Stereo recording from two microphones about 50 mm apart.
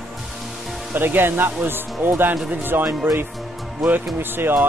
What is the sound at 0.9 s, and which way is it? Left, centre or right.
Speech, right.